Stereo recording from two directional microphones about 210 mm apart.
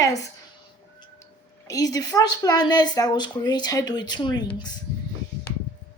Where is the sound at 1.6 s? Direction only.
15° left (ahead or behind).